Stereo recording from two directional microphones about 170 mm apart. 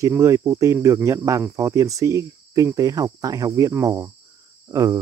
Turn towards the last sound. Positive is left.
turn(degrees=-20)  # may be behind; listen again after turning